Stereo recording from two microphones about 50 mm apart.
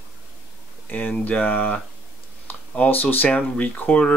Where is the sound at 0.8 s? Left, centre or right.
Left.